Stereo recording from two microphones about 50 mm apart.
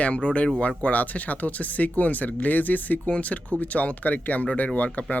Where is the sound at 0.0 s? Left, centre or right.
Left.